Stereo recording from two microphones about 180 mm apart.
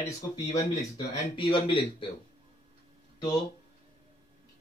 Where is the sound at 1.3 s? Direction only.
30° left (ahead or behind).